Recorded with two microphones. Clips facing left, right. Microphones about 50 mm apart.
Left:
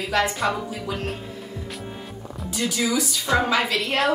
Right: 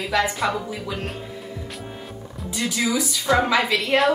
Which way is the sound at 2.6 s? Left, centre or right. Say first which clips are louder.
Even; centre.